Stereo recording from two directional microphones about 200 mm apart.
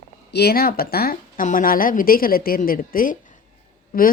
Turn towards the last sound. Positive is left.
turn(degrees=45)  # may be behind; listen again after turning